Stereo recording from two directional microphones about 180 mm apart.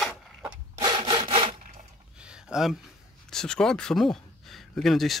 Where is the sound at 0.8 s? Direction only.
25° right (ahead or behind).